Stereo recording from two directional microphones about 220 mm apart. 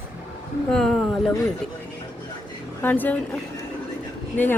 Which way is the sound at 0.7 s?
Centre (ahead or behind).